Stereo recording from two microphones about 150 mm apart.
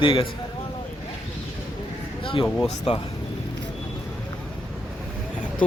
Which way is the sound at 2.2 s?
35° left (ahead or behind).